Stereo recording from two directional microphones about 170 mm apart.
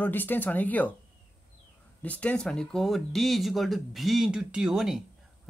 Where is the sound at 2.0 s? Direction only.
10° left (ahead or behind).